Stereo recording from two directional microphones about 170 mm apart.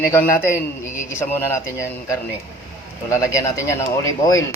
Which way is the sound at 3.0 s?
20° left (ahead or behind).